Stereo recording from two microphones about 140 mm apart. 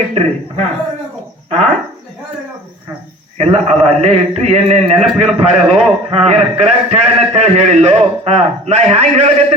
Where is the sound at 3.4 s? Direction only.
45° right (ahead or behind).